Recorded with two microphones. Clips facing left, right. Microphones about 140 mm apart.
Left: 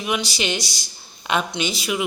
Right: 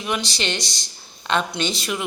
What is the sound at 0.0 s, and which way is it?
A man's voice, 10° left (ahead or behind).